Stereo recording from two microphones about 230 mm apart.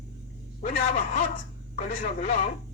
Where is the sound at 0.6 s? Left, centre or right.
Left.